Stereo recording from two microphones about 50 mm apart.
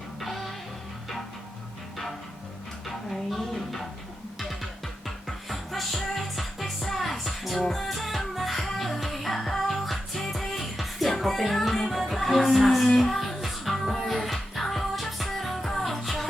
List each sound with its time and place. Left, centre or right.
0.2 s music: centre
3.1 s music: centre
5.0 s music: centre